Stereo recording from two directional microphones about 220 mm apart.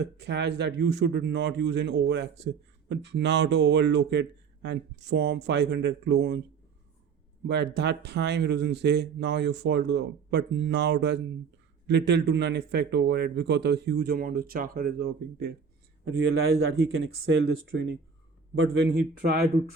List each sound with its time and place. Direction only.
0.0 s speech: 50° right (ahead or behind)
7.4 s speech: 50° right (ahead or behind)
16.9 s speech: 60° right (ahead or behind)